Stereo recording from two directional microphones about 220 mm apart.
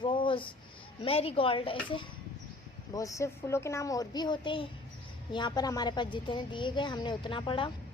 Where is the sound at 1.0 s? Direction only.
25° left (ahead or behind).